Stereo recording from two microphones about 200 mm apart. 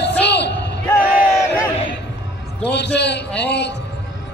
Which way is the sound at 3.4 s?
60° left (ahead or behind).